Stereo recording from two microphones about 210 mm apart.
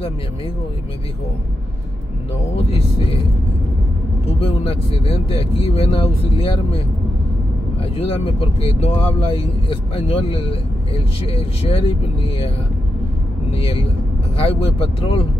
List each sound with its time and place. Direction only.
4.4 s speech: 25° left (ahead or behind)
7.8 s speech: 25° left (ahead or behind)
13.5 s speech: 25° left (ahead or behind)